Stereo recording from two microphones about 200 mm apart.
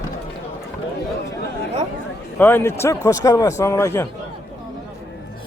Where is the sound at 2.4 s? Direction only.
10° left (ahead or behind).